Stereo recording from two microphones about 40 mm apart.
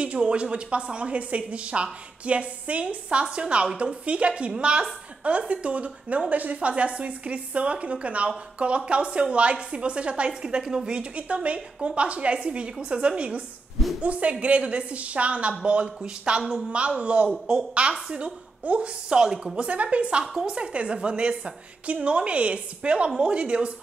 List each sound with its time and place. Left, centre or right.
0.0 s a woman's voice: right
11.0 s a woman's voice: right
19.0 s a woman's voice: centre